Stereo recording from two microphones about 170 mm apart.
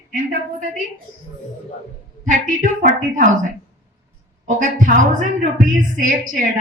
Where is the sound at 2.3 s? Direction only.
50° right (ahead or behind).